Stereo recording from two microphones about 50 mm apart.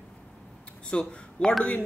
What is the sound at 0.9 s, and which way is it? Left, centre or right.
Speech, centre.